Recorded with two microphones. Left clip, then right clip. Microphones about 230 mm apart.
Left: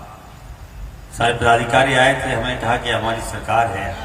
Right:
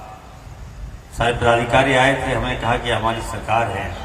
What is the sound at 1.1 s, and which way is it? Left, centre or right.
A man's voice, left.